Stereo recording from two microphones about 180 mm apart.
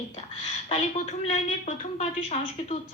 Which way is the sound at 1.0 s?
40° left (ahead or behind).